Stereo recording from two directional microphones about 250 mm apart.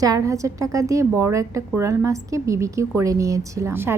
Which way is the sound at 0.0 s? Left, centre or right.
Centre.